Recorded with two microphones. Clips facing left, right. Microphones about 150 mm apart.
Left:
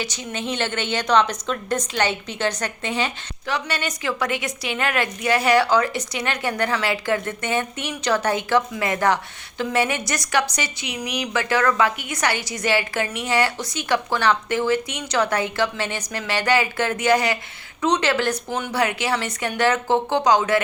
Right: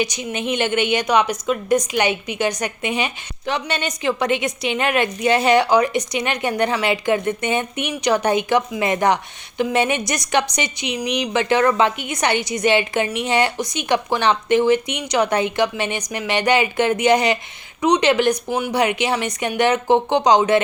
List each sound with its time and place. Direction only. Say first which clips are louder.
0.0 s a woman's voice: right 5 dB; 15° right (ahead or behind)